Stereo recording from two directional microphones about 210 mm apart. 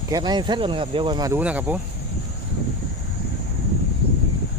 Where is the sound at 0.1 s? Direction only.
20° right (ahead or behind).